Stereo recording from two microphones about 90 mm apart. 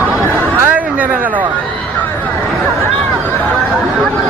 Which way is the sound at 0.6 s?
20° right (ahead or behind).